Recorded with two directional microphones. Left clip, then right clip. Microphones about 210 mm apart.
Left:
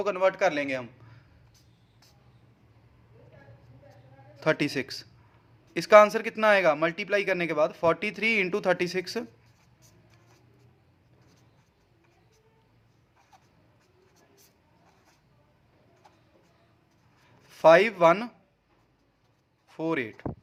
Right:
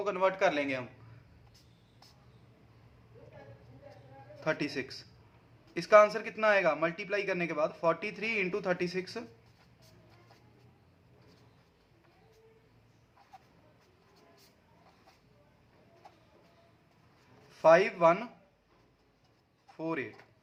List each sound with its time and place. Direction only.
0.0 s a man's voice: 30° left (ahead or behind)
4.4 s a man's voice: 45° left (ahead or behind)
17.5 s speech: 45° left (ahead or behind)
19.7 s a man's voice: 45° left (ahead or behind)